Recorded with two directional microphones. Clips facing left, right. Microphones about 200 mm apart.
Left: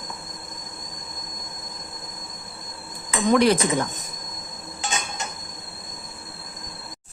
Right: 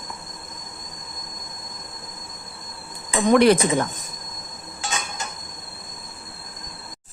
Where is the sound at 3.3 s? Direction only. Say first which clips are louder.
Right 3 dB; 60° right (ahead or behind).